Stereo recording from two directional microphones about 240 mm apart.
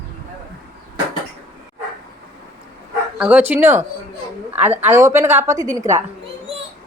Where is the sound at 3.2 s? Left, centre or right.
Centre.